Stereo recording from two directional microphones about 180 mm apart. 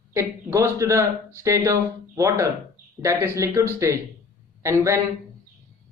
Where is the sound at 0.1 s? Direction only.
15° right (ahead or behind).